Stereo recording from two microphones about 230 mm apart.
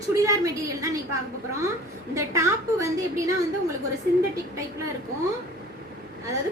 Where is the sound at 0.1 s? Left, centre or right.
Centre.